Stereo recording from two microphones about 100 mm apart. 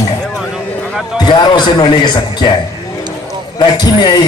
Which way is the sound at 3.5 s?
45° left (ahead or behind).